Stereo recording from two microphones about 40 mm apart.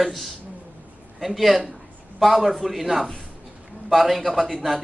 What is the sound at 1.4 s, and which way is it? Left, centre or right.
A man's voice, centre.